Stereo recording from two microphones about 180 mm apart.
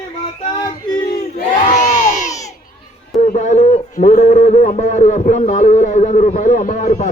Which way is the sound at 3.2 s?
45° left (ahead or behind).